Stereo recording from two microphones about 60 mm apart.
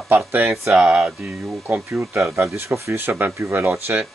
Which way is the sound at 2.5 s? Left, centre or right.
Right.